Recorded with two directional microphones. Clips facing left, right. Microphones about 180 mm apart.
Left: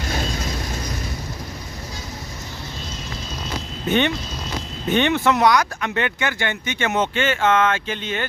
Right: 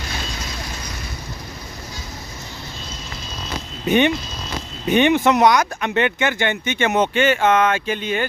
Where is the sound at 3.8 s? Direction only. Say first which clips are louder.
Right 3 dB; 15° right (ahead or behind).